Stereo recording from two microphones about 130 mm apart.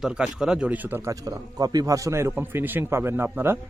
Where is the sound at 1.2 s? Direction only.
30° right (ahead or behind).